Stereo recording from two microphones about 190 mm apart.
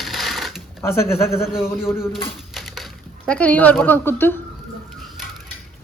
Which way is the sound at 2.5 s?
Centre (ahead or behind).